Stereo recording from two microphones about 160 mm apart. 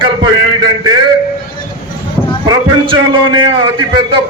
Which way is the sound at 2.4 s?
30° right (ahead or behind).